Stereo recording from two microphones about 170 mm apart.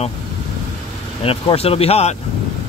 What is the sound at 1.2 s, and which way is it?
Speech, 35° left (ahead or behind).